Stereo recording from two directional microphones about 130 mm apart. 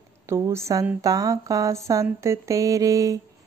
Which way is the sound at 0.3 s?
20° right (ahead or behind).